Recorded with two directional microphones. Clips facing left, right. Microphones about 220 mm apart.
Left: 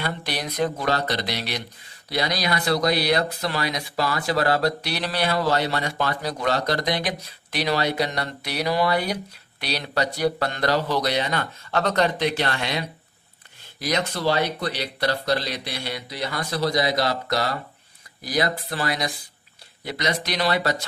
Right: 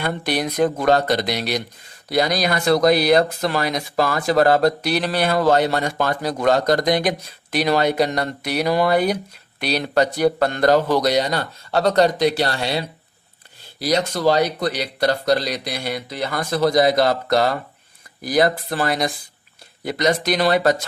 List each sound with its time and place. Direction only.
0.0 s speech: 50° right (ahead or behind)